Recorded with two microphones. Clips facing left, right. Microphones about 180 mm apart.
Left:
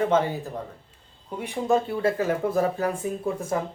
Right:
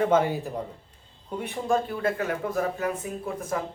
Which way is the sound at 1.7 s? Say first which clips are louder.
Left 3 dB; 30° left (ahead or behind).